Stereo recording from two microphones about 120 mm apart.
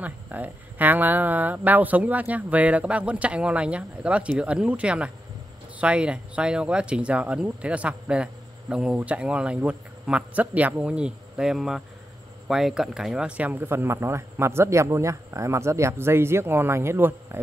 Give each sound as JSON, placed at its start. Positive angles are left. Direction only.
{"t": 0.0, "sound": "speech", "side_deg": -15}